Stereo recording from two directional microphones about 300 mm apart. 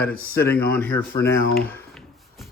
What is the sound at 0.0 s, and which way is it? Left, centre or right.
Speech, left.